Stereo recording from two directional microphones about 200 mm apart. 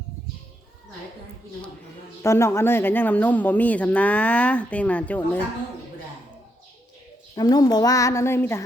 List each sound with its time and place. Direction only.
2.2 s speech: 15° left (ahead or behind)
7.3 s speech: 20° left (ahead or behind)